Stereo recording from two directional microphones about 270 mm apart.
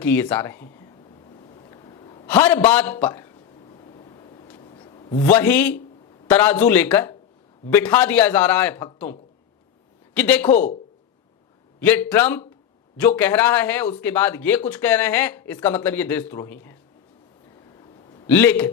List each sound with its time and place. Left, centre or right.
0.0 s a man's voice: centre
1.5 s a sound: centre
6.2 s a man's voice: centre
10.2 s a man's voice: centre
11.8 s a man's voice: centre
18.3 s a man's voice: centre